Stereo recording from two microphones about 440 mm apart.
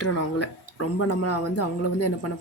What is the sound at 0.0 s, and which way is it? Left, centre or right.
Speech, left.